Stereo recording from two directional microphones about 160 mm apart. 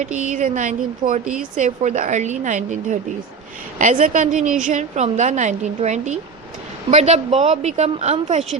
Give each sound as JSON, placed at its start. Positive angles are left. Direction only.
{"t": 0.0, "sound": "a woman's voice", "side_deg": -50}
{"t": 1.2, "sound": "speech", "side_deg": -5}
{"t": 1.5, "sound": "a woman's voice", "side_deg": -50}